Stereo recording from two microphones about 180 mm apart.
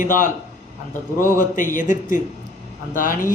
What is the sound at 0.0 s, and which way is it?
A man's voice, 50° left (ahead or behind).